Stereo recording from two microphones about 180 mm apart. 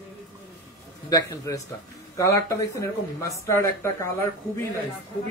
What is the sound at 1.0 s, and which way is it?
Speech, 20° left (ahead or behind).